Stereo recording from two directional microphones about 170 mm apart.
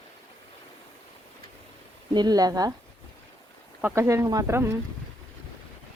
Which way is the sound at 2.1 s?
25° right (ahead or behind).